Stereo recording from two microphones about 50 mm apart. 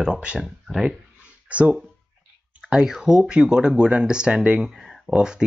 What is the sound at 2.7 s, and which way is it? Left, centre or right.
Speech, centre.